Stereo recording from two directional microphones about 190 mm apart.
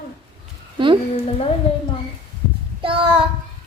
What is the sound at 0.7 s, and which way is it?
Speech, 25° right (ahead or behind).